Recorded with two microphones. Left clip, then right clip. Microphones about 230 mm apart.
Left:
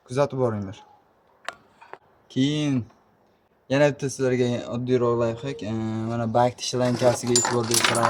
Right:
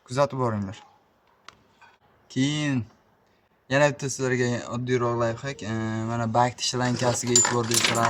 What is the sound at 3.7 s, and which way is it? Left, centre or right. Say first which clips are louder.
Speech: left 1 dB; right.